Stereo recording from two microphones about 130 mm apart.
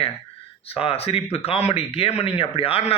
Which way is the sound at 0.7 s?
50° left (ahead or behind).